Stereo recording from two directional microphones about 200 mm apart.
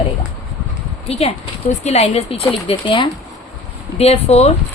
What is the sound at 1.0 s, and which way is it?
Speech, 30° left (ahead or behind).